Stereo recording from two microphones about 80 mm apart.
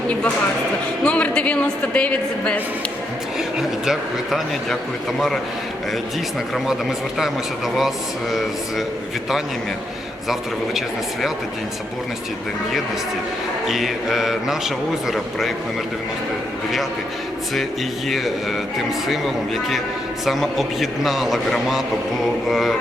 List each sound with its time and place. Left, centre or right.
1.0 s a woman's voice: centre
3.6 s a man's voice: centre
7.8 s a man's voice: centre
13.7 s a man's voice: centre
19.0 s a man's voice: centre